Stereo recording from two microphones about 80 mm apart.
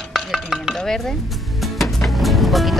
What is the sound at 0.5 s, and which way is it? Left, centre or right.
Music, centre.